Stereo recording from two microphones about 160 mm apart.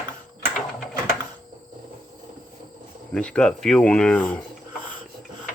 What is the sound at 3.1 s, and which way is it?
Speech, 5° left (ahead or behind).